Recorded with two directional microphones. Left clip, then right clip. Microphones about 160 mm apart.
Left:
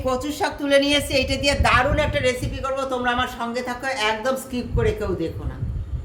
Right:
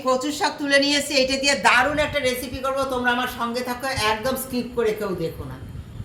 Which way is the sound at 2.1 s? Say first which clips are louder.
Left 1 dB; 10° left (ahead or behind).